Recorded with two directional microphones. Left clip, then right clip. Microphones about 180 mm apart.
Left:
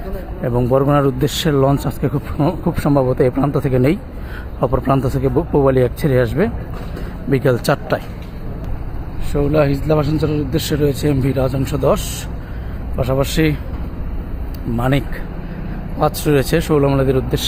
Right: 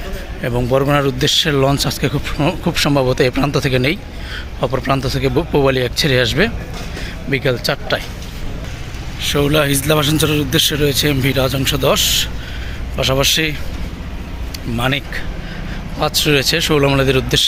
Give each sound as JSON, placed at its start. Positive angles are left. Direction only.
{"t": 0.4, "sound": "speech", "side_deg": 5}
{"t": 7.3, "sound": "speech", "side_deg": 20}
{"t": 9.3, "sound": "speech", "side_deg": 0}
{"t": 14.8, "sound": "speech", "side_deg": 15}